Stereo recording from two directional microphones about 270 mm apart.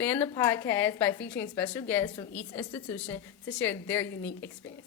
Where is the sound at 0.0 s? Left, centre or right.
Centre.